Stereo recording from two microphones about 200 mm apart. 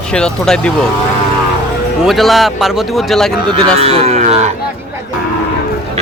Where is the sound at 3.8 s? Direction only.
30° right (ahead or behind).